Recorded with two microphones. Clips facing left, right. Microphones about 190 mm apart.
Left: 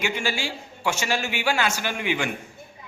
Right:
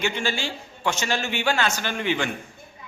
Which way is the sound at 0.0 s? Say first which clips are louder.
Right 1 dB; 10° left (ahead or behind).